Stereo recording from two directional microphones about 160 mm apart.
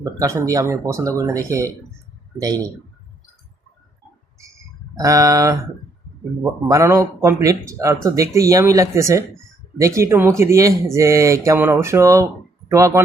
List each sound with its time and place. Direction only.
0.0 s a man's voice: 20° right (ahead or behind)
4.9 s a man's voice: 20° right (ahead or behind)